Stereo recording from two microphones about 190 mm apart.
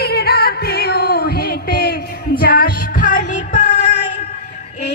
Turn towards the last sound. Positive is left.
turn(degrees=40)  # may be behind; listen again after turning